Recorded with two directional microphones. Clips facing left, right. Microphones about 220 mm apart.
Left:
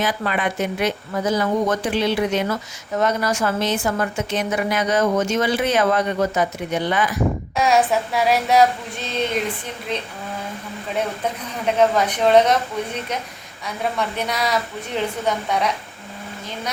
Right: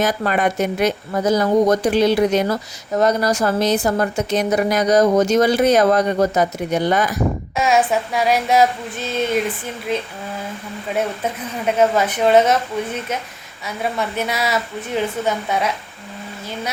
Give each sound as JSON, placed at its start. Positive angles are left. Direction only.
{"t": 0.0, "sound": "speech", "side_deg": -45}
{"t": 7.5, "sound": "a woman's voice", "side_deg": 0}
{"t": 11.2, "sound": "a woman's voice", "side_deg": -5}
{"t": 14.2, "sound": "a woman's voice", "side_deg": -5}